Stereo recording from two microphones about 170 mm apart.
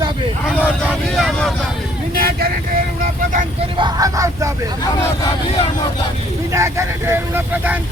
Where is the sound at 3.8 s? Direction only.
25° right (ahead or behind).